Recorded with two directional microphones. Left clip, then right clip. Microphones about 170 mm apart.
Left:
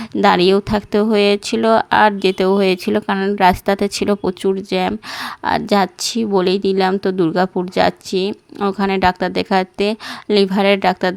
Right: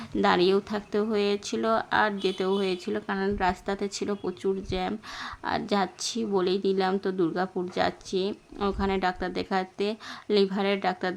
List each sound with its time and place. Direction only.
0.2 s speech: 45° left (ahead or behind)